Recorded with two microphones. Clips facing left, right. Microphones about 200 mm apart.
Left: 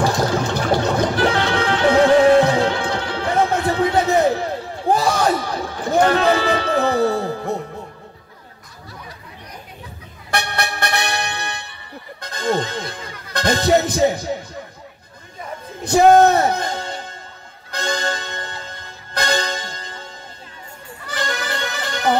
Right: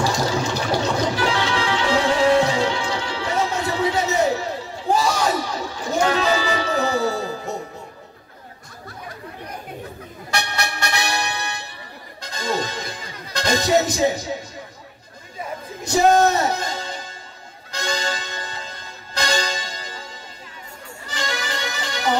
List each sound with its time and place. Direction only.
0.0 s music: 55° left (ahead or behind)
10.3 s music: 55° left (ahead or behind)
15.8 s music: 55° left (ahead or behind)
21.1 s music: 55° left (ahead or behind)